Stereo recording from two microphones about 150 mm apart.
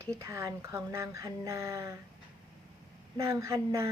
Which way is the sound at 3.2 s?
20° right (ahead or behind).